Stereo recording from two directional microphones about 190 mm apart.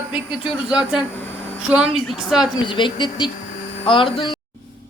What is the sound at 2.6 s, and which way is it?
Speech, 25° left (ahead or behind).